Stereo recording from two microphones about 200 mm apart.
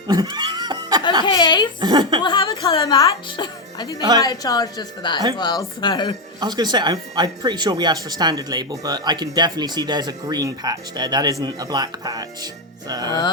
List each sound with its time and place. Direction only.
0.1 s laughter: 20° right (ahead or behind)
1.2 s a woman's voice: 20° left (ahead or behind)
1.8 s speech: 20° right (ahead or behind)
2.2 s a woman's voice: 20° left (ahead or behind)
6.4 s speech: 20° right (ahead or behind)